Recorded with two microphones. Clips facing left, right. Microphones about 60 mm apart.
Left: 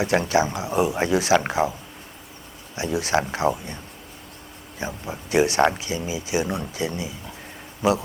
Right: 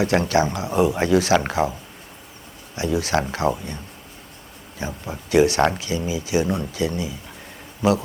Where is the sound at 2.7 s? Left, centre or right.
Left.